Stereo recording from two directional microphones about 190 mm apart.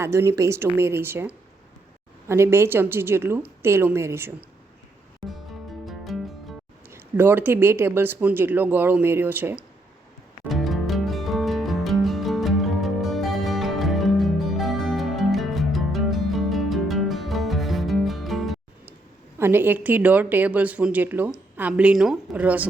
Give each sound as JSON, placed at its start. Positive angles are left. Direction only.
{"t": 0.0, "sound": "a woman's voice", "side_deg": -15}
{"t": 5.8, "sound": "music", "side_deg": 0}
{"t": 6.9, "sound": "a woman's voice", "side_deg": -10}
{"t": 10.5, "sound": "music", "side_deg": 0}
{"t": 19.4, "sound": "a woman's voice", "side_deg": -10}